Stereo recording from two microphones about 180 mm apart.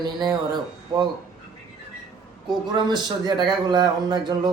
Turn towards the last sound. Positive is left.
turn(degrees=-25)  # may be behind; listen again after turning